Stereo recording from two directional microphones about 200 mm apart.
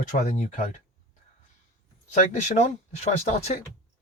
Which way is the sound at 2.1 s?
35° left (ahead or behind).